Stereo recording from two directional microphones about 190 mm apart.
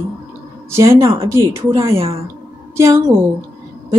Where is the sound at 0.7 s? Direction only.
15° right (ahead or behind).